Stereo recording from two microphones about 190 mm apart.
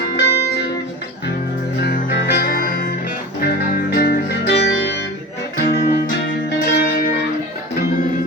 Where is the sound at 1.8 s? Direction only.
55° left (ahead or behind).